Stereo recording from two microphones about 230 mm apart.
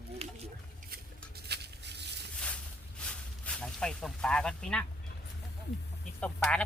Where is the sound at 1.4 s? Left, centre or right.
Right.